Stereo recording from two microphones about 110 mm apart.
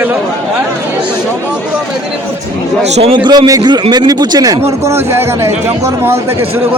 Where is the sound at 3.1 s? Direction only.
45° right (ahead or behind); by 5.5 s 20° right (ahead or behind).